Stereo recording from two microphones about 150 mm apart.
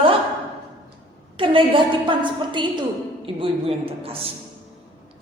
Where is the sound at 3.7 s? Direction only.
40° right (ahead or behind).